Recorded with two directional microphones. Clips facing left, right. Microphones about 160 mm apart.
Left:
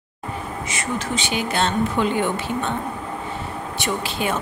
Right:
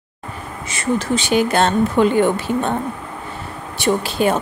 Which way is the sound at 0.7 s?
35° right (ahead or behind).